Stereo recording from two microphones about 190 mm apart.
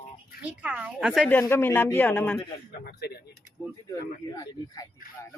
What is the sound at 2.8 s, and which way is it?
Speech, 55° left (ahead or behind).